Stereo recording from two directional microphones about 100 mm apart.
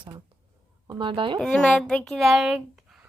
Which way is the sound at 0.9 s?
55° right (ahead or behind).